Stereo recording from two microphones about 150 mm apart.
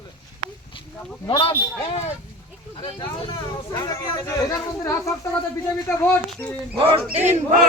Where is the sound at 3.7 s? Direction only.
25° left (ahead or behind).